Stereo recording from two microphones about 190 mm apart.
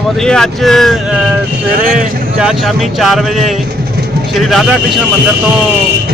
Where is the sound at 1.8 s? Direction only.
45° right (ahead or behind).